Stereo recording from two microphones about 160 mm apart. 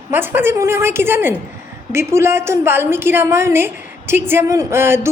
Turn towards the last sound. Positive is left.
turn(degrees=-15)  # may be behind; listen again after turning